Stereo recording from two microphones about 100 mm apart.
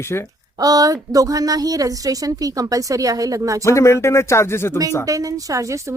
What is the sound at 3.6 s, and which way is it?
Speech, 30° left (ahead or behind).